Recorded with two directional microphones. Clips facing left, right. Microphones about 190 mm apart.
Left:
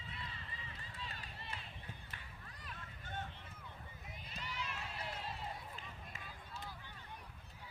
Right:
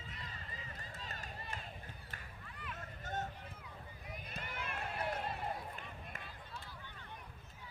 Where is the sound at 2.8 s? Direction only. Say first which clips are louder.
Right 5 dB; 40° right (ahead or behind).